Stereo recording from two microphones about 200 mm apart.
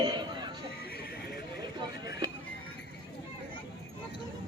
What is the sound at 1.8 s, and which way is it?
Chatter, 20° right (ahead or behind).